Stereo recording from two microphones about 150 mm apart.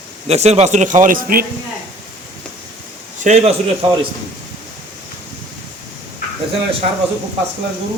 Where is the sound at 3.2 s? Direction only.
50° right (ahead or behind).